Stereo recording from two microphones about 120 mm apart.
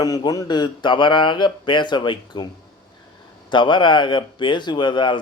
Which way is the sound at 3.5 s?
40° left (ahead or behind).